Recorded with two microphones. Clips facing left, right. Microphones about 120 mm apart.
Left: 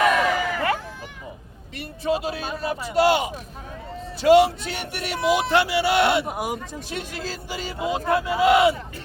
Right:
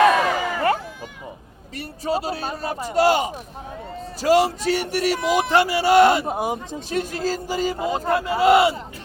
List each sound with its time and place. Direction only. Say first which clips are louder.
0.0 s a sound: right 3 dB; 35° right (ahead or behind)
1.7 s speech: even; 35° right (ahead or behind)
6.2 s speech: right 3 dB; 25° right (ahead or behind)
6.9 s speech: right 9 dB; 40° right (ahead or behind)